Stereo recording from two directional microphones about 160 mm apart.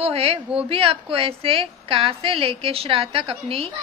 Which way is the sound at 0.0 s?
40° right (ahead or behind).